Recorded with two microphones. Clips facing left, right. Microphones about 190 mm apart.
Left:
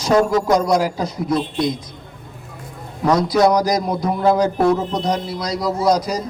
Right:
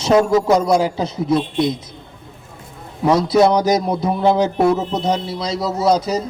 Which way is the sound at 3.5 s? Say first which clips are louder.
Right 2 dB; 25° right (ahead or behind).